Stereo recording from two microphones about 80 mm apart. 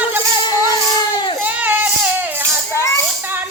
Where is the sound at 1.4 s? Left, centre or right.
Right.